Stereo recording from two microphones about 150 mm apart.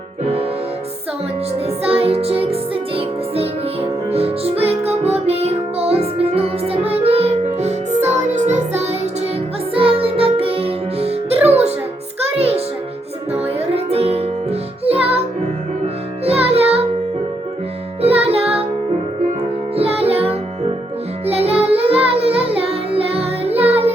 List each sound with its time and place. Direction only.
1.6 s music: 40° right (ahead or behind)
9.7 s music: 40° right (ahead or behind)
11.3 s music: 10° right (ahead or behind)
12.4 s music: 45° right (ahead or behind)
16.2 s music: 40° right (ahead or behind)
18.0 s music: 40° right (ahead or behind)
19.7 s music: 40° right (ahead or behind)